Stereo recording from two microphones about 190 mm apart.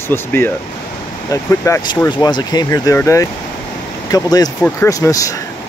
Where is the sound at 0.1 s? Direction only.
10° left (ahead or behind).